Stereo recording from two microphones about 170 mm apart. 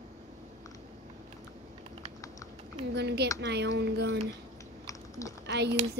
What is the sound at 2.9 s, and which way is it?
Speech, 75° right (ahead or behind).